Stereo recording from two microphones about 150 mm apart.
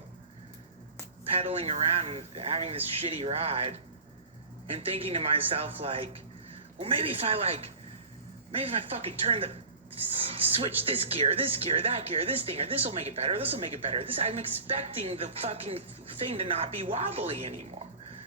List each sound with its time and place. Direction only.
1.4 s speech: 45° right (ahead or behind)